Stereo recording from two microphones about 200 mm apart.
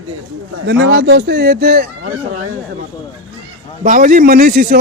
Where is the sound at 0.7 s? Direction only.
60° right (ahead or behind).